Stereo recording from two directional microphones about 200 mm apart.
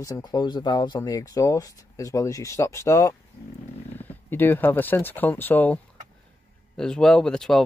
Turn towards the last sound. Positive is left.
turn(degrees=0)  # may be behind; listen again after turning